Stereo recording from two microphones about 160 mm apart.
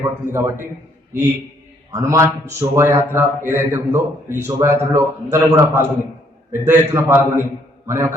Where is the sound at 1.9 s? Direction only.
20° right (ahead or behind).